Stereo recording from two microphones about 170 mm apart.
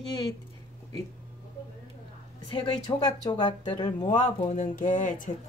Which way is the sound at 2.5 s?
30° left (ahead or behind).